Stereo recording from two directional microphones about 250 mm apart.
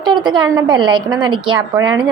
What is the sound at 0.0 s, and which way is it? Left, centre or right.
A woman's voice, centre.